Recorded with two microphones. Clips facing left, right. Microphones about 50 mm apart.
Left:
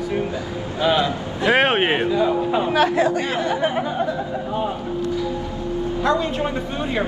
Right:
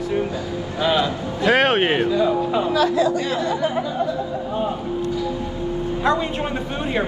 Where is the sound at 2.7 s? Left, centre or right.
Left.